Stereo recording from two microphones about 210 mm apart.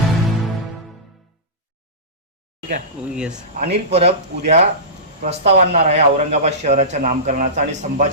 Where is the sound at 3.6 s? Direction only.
30° right (ahead or behind).